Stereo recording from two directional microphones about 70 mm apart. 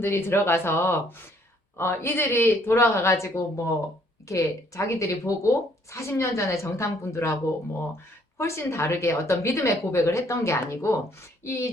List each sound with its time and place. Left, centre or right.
0.0 s a woman's voice: left
8.4 s a woman's voice: left